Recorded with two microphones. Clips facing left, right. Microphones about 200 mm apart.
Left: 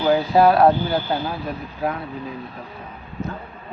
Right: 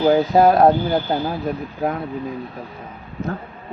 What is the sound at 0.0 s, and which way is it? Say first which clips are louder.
Speech: right 2 dB; 40° right (ahead or behind).